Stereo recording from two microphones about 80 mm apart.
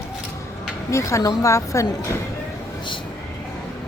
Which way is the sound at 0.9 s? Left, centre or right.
Left.